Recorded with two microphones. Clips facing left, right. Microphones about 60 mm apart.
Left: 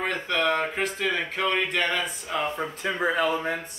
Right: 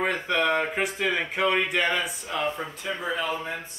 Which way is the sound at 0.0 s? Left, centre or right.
Centre.